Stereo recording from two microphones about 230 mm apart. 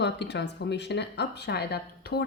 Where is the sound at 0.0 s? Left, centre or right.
Left.